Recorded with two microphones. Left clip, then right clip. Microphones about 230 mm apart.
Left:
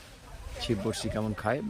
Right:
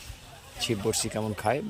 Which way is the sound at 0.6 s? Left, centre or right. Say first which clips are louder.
Right 3 dB; centre.